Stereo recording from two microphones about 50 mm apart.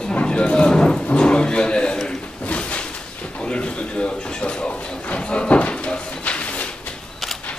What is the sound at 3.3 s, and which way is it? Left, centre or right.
Drawer open or close, left.